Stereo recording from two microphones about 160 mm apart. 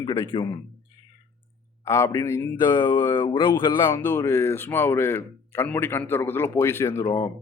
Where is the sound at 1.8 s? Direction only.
20° left (ahead or behind).